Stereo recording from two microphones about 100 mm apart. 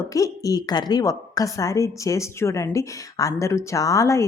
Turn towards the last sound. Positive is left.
turn(degrees=30)  # may be behind; listen again after turning